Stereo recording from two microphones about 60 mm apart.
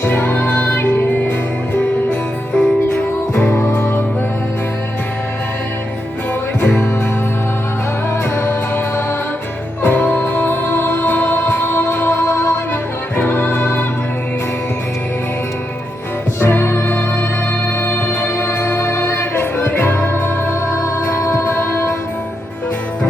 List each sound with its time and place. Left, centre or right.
0.0 s music: left
2.5 s music: centre
2.9 s music: left
3.8 s music: left
6.6 s music: left
8.4 s music: left
9.8 s music: left
13.1 s music: left
16.4 s music: left
19.5 s music: left